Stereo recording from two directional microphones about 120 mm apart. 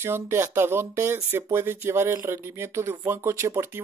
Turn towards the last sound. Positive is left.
turn(degrees=-20)  # may be behind; listen again after turning